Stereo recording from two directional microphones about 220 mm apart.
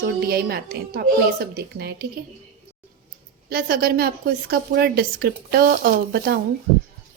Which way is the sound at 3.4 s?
45° right (ahead or behind).